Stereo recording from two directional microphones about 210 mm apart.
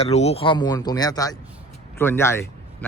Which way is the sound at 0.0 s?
30° left (ahead or behind).